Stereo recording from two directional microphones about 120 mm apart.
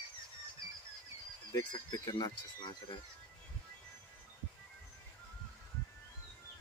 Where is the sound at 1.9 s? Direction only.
35° left (ahead or behind).